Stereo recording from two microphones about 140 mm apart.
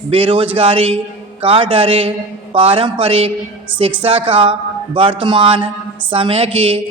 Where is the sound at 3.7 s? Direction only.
10° right (ahead or behind).